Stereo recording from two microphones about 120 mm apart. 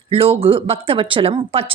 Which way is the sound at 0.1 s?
55° right (ahead or behind).